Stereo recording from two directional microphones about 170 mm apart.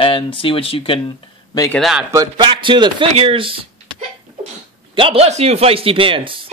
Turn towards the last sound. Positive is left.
turn(degrees=-30)  # may be behind; listen again after turning